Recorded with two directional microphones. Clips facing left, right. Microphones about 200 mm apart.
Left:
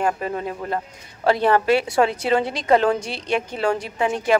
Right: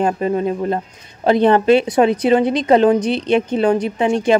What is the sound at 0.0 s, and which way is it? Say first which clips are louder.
Speech: right 6 dB; 20° right (ahead or behind).